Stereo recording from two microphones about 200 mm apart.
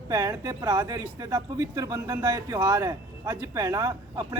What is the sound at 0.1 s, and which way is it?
Speech, 15° right (ahead or behind).